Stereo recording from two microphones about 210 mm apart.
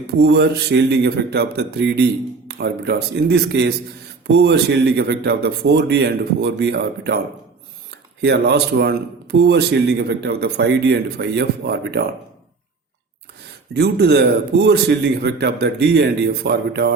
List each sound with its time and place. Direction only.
0.2 s speech: 55° right (ahead or behind)
8.2 s speech: 50° right (ahead or behind)
13.7 s speech: 50° right (ahead or behind)